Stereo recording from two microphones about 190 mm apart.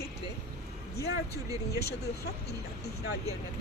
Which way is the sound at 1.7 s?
60° left (ahead or behind).